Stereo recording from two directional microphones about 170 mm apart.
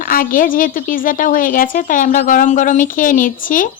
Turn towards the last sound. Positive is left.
turn(degrees=50)  # may be behind; listen again after turning